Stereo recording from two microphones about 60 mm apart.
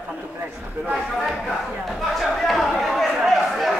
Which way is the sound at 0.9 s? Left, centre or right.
Centre.